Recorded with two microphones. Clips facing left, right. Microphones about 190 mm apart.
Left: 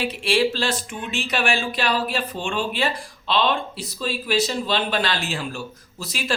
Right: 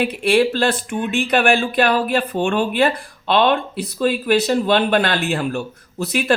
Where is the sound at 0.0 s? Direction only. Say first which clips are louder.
Right 5 dB; 55° right (ahead or behind).